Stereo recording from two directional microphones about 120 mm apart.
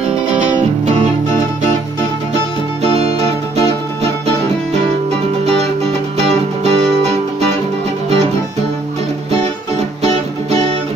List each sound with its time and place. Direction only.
6.2 s music: 60° right (ahead or behind)